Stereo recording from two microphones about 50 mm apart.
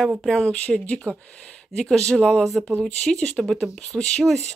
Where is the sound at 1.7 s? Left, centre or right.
Centre.